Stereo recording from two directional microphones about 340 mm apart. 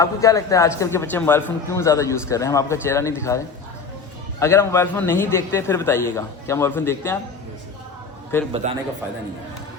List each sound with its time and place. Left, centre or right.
0.0 s a man's voice: centre
8.6 s a man's voice: centre